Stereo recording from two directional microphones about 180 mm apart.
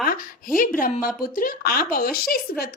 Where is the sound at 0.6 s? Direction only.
50° left (ahead or behind).